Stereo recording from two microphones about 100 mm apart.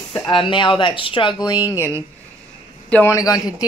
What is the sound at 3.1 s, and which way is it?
Speech, 35° left (ahead or behind).